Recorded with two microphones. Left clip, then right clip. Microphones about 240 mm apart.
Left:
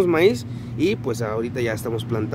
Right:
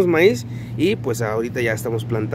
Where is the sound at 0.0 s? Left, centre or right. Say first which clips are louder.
Right 2 dB; centre.